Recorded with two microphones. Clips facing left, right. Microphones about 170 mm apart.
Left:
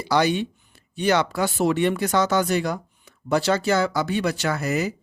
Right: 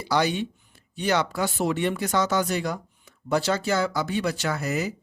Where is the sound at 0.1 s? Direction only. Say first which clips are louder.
Left 3 dB; 75° left (ahead or behind).